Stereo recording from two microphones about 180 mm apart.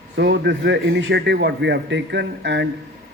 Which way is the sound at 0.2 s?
70° right (ahead or behind).